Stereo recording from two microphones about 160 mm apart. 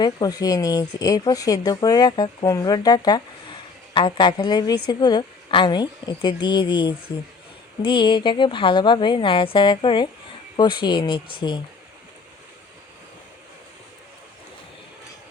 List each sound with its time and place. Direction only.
0.0 s a woman's voice: 25° left (ahead or behind)